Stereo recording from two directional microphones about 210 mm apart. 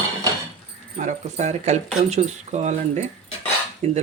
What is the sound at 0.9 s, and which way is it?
Speech, 30° right (ahead or behind).